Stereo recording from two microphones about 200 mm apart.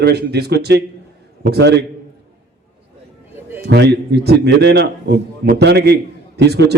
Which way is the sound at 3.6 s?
55° right (ahead or behind).